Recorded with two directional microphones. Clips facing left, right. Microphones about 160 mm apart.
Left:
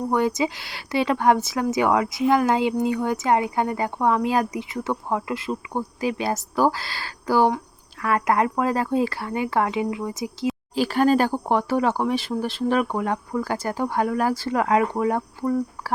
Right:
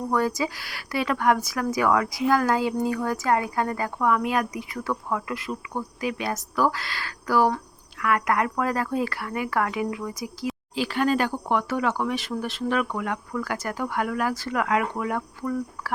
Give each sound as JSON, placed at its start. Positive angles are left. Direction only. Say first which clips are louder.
{"t": 0.1, "sound": "speech", "louder": "left 2 dB", "side_deg": 20}
{"t": 10.8, "sound": "speech", "louder": "left 4 dB", "side_deg": 40}